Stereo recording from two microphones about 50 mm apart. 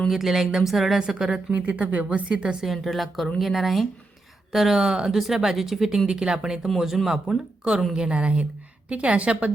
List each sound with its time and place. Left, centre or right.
0.1 s a woman's voice: centre
1.5 s a woman's voice: right
2.7 s a woman's voice: centre; by 9.5 s right